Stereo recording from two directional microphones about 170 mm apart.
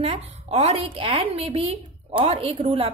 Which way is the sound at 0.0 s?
35° right (ahead or behind).